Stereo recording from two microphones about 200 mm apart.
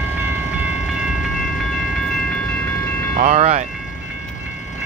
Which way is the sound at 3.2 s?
35° right (ahead or behind).